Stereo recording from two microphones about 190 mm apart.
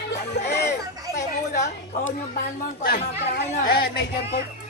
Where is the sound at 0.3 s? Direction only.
60° left (ahead or behind).